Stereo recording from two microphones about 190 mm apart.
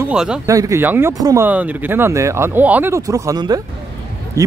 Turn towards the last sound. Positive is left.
turn(degrees=-15)  # may be behind; listen again after turning